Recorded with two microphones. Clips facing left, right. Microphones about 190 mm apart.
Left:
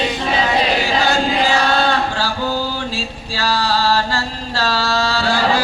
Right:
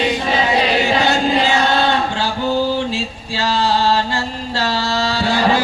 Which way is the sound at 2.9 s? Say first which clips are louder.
Right 2 dB; 20° right (ahead or behind).